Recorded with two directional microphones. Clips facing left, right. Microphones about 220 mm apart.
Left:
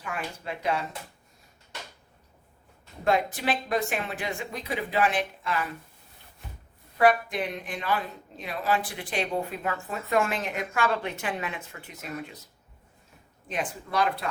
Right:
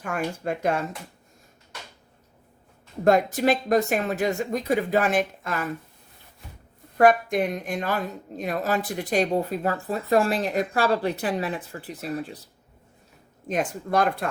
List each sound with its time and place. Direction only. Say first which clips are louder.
0.0 s a woman's voice: right 7 dB; 45° right (ahead or behind)
3.0 s a woman's voice: right 6 dB; 45° right (ahead or behind)
6.9 s speech: right 4 dB; 45° right (ahead or behind)
13.5 s a woman's voice: right 6 dB; 45° right (ahead or behind)